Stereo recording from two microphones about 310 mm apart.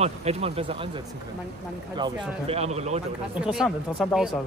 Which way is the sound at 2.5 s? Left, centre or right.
Centre.